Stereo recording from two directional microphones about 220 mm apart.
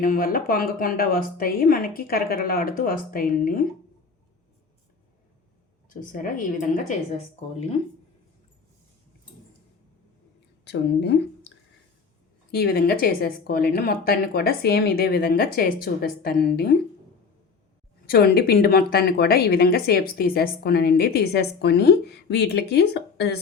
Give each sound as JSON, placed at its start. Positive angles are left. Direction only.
{"t": 0.0, "sound": "a woman's voice", "side_deg": 40}
{"t": 5.9, "sound": "a woman's voice", "side_deg": 40}
{"t": 10.7, "sound": "speech", "side_deg": 50}
{"t": 18.0, "sound": "speech", "side_deg": 45}